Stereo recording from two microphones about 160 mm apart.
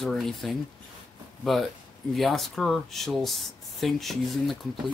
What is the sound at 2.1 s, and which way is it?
Speech, centre (ahead or behind).